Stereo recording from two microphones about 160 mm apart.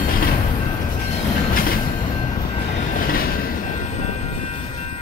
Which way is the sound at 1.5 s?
65° left (ahead or behind).